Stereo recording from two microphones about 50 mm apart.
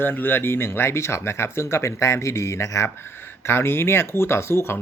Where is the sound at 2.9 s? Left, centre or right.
Left.